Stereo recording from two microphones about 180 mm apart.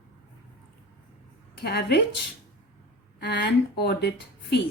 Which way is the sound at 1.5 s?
65° left (ahead or behind).